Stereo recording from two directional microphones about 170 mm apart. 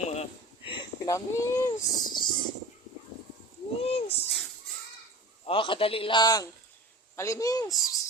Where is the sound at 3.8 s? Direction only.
35° left (ahead or behind).